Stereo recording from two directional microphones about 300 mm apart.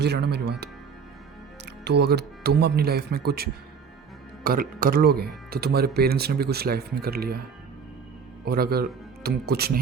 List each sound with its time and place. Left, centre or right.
0.0 s speech: right
1.8 s speech: right
8.4 s speech: right